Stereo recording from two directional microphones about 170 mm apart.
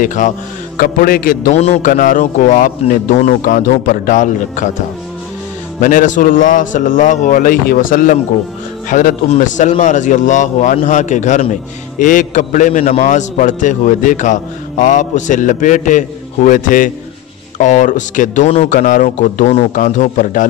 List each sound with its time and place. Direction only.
0.0 s a man's voice: 45° left (ahead or behind)
1.9 s a man's voice: 50° left (ahead or behind)
5.8 s a man's voice: 50° left (ahead or behind)